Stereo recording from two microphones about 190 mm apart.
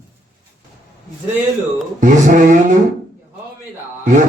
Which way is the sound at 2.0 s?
40° right (ahead or behind).